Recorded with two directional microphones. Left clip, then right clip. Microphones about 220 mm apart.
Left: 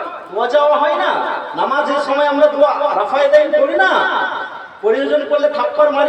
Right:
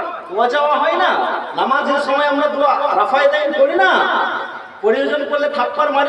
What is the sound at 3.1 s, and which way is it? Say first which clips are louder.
Speech: right 1 dB; 35° right (ahead or behind).